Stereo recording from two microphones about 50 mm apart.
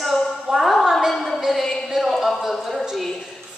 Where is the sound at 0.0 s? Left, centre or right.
Centre.